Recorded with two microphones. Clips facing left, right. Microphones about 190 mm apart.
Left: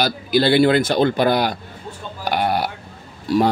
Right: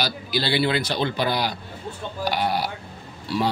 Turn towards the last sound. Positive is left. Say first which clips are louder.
# left 8 dB
turn(degrees=45)  # may be behind; listen again after turning